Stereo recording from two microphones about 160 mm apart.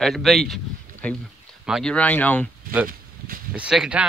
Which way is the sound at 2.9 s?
65° right (ahead or behind).